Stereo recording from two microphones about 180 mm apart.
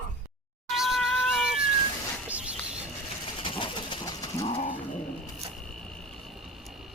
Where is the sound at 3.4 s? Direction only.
30° left (ahead or behind).